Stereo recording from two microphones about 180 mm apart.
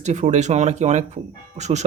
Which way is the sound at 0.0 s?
40° right (ahead or behind).